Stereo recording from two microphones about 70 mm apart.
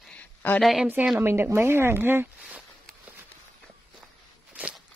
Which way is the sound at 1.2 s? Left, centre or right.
Right.